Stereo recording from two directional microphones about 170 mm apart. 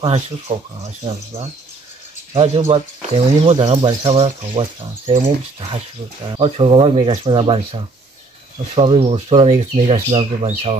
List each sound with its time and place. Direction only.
0.0 s speech: 30° right (ahead or behind)